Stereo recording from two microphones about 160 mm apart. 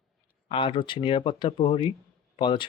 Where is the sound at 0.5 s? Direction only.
30° left (ahead or behind).